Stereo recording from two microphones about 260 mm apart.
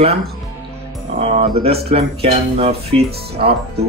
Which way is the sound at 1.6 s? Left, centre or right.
Right.